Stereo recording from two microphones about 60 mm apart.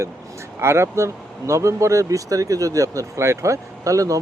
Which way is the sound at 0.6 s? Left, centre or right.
Right.